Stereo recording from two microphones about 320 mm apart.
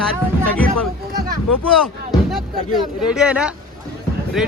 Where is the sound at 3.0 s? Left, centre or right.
Centre.